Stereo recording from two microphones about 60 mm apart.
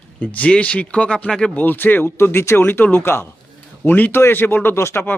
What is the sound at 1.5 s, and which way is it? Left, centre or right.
Speech, left.